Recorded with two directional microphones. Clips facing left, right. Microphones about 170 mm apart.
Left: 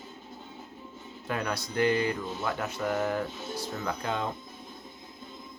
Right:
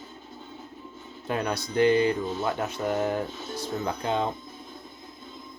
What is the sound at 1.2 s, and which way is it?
Music, 20° right (ahead or behind).